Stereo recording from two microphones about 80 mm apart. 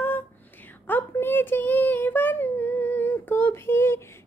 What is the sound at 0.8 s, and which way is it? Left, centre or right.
Child singing, left.